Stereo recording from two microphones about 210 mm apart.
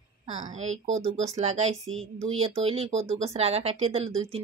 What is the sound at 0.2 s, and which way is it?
Speech, 35° right (ahead or behind).